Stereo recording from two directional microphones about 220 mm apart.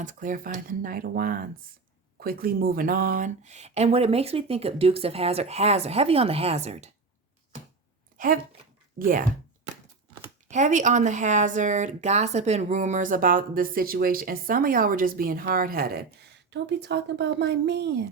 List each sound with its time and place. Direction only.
0.0 s speech: 35° right (ahead or behind)
9.0 s speech: 35° right (ahead or behind)
10.5 s speech: 35° right (ahead or behind); by 18.0 s 50° right (ahead or behind)